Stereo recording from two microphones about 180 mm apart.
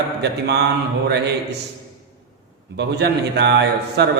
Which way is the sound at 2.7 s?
70° right (ahead or behind).